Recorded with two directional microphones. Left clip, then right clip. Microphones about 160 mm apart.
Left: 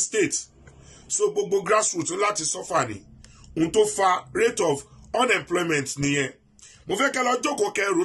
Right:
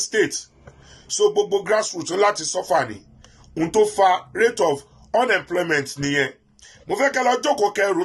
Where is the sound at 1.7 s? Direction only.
20° left (ahead or behind).